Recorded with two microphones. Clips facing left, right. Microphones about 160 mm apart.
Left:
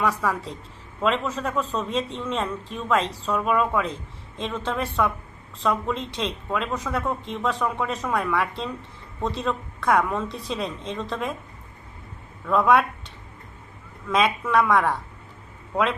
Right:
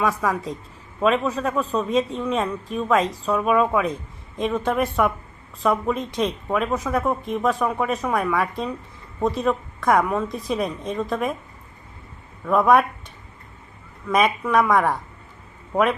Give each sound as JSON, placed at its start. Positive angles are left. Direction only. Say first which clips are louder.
{"t": 0.0, "sound": "speech", "louder": "right 2 dB", "side_deg": -10}
{"t": 12.5, "sound": "speech", "louder": "right 2 dB", "side_deg": -10}
{"t": 14.1, "sound": "speech", "louder": "right 2 dB", "side_deg": -15}